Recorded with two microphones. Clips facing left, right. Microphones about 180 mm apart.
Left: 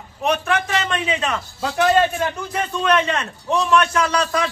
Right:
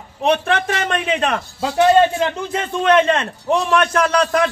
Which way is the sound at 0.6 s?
55° right (ahead or behind).